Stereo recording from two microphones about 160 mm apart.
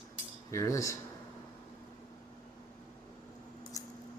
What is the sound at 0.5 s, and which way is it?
Speech, 20° left (ahead or behind).